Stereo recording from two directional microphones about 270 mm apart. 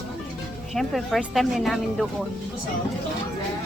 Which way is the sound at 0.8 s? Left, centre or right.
Centre.